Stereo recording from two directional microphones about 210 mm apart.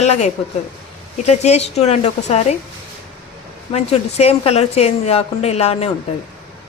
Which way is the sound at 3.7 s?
30° left (ahead or behind).